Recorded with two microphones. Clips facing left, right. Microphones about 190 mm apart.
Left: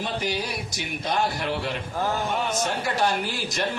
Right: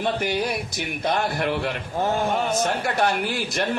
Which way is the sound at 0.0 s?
55° right (ahead or behind).